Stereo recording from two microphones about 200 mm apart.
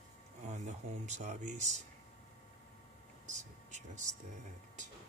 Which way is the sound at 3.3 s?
35° right (ahead or behind).